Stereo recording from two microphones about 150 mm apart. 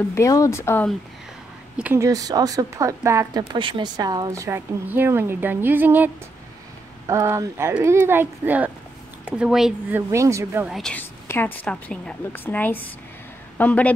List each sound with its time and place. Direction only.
0.1 s a woman's voice: 20° left (ahead or behind)
1.8 s a woman's voice: 10° right (ahead or behind)
2.0 s speech: 25° right (ahead or behind)
3.5 s a woman's voice: 35° right (ahead or behind); by 9.9 s 5° right (ahead or behind)
9.9 s a woman's voice: 20° right (ahead or behind)
10.7 s a woman's voice: 5° left (ahead or behind)